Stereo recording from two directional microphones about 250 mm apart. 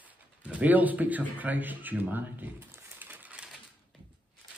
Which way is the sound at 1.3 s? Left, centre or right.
Centre.